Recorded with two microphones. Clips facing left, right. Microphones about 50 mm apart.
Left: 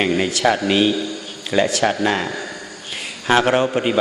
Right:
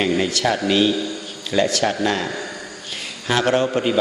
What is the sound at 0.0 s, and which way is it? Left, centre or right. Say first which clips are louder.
A man's voice: left 2 dB; centre.